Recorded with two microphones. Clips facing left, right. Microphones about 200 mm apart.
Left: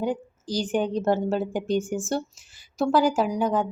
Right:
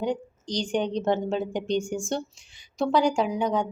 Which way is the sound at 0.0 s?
5° left (ahead or behind).